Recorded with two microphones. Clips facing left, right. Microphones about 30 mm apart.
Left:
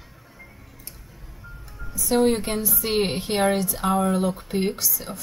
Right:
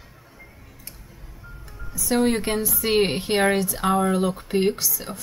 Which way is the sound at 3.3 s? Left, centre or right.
Centre.